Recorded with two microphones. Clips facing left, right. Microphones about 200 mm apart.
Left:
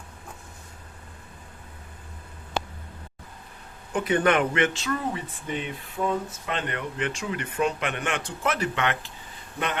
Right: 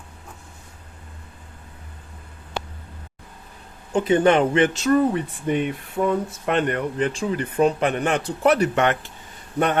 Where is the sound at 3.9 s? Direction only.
25° right (ahead or behind).